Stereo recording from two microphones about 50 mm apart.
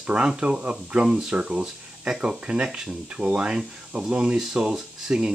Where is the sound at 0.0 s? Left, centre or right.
Right.